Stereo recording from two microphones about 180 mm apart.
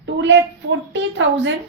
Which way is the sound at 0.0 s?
90° right.